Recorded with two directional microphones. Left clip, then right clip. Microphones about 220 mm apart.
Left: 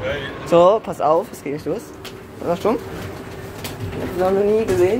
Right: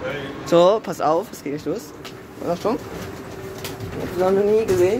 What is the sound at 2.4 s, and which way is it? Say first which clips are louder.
Speech: left 3 dB; 5° left (ahead or behind).